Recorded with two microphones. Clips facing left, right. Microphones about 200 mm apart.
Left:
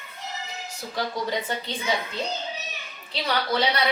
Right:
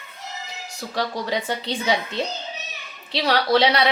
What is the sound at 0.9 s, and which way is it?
A woman's voice, 85° right.